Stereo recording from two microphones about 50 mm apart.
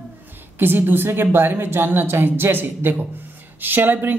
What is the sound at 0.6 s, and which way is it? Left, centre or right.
A woman's voice, right.